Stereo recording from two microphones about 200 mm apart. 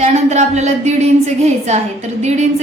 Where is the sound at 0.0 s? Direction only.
35° right (ahead or behind).